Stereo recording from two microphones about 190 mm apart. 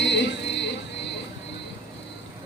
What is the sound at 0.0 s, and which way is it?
Music, 70° left (ahead or behind).